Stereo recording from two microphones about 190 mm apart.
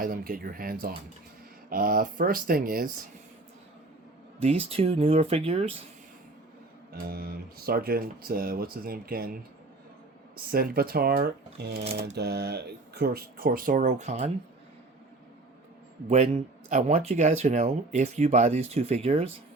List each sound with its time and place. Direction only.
0.0 s speech: 50° right (ahead or behind)
4.4 s speech: 30° right (ahead or behind)
6.9 s speech: 55° right (ahead or behind)
10.5 s speech: 50° right (ahead or behind); by 14.3 s 35° right (ahead or behind)
16.0 s speech: 35° right (ahead or behind)